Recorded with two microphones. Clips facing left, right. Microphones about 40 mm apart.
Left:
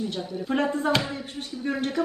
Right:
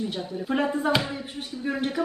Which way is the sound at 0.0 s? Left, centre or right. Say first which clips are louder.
Even; centre.